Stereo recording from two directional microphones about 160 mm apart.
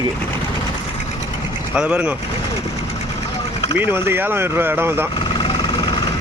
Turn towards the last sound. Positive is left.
turn(degrees=30)  # may be behind; listen again after turning